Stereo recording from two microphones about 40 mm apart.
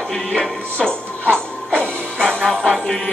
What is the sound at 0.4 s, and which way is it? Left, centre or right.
Music, left.